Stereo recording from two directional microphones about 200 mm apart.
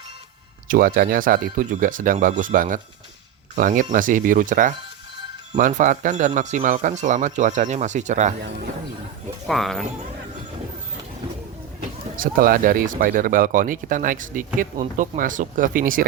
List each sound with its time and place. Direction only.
0.7 s speech: 45° right (ahead or behind)
9.5 s speech: centre (ahead or behind)
12.1 s speech: 45° right (ahead or behind)